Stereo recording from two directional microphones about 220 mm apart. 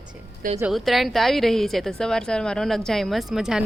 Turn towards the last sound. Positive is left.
turn(degrees=0)  # may be behind; listen again after turning